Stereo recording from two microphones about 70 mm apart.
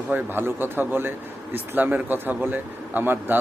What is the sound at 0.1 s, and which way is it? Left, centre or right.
A man's voice, right.